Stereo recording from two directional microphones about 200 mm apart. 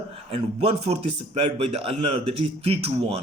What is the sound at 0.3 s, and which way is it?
A man's voice, 30° right (ahead or behind).